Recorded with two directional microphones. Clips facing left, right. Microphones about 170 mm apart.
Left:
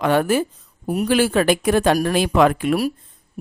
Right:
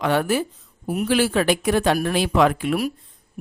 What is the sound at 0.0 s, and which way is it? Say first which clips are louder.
Speech: left 3 dB; 50° left (ahead or behind).